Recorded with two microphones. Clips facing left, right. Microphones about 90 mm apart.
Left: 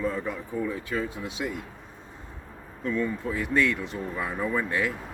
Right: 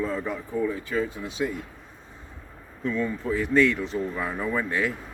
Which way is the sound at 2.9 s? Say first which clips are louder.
Right 1 dB; 5° left (ahead or behind).